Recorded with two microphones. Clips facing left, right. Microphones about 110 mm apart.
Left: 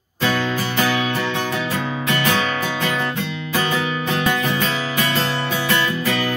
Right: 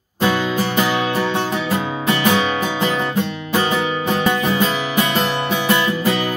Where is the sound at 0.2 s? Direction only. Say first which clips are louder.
Right 3 dB; 15° right (ahead or behind).